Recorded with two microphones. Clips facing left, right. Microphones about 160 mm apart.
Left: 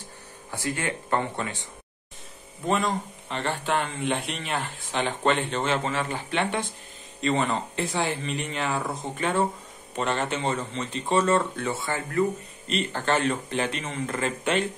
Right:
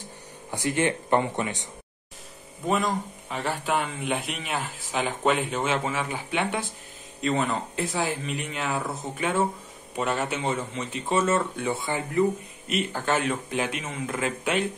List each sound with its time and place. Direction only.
0.5 s speech: 20° right (ahead or behind)
2.6 s speech: 5° right (ahead or behind)